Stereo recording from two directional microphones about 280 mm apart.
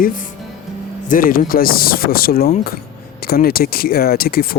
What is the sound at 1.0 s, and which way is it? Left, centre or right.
Speech, left.